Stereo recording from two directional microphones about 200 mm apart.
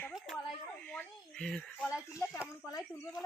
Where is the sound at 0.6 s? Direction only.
5° left (ahead or behind).